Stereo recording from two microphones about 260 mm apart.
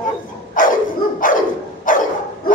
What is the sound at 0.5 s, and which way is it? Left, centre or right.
Dog, left.